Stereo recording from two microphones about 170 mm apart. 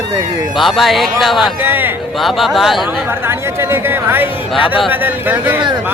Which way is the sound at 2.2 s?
Centre (ahead or behind).